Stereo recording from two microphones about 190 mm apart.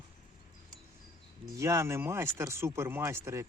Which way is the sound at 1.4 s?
15° right (ahead or behind).